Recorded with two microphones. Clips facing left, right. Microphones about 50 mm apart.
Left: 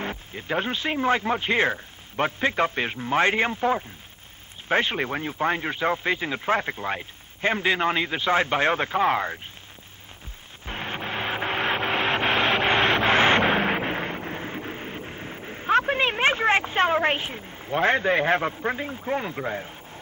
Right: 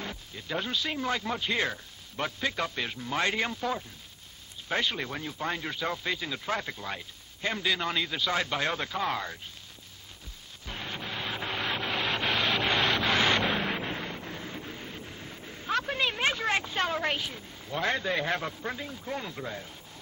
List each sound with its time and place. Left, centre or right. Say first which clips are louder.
0.0 s speech: left 7 dB; left
10.6 s vehicle: left 6 dB; left